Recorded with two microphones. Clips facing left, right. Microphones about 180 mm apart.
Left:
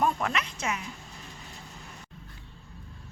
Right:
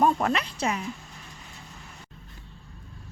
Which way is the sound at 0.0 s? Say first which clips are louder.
Right 5 dB; 35° right (ahead or behind).